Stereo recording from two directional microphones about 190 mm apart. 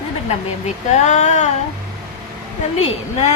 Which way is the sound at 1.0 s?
40° left (ahead or behind).